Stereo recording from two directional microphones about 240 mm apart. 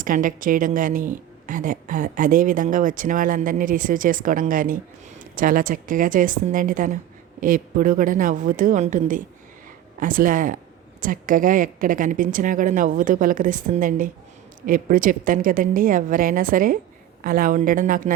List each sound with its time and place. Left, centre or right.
0.0 s a woman's voice: right